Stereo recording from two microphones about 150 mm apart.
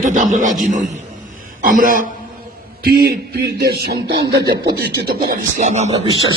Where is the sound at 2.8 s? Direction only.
90° right.